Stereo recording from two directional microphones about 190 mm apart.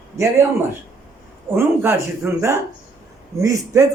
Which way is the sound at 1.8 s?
15° right (ahead or behind).